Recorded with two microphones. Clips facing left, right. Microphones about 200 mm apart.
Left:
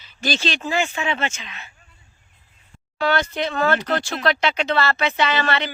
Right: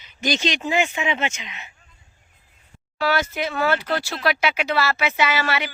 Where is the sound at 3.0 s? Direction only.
5° right (ahead or behind).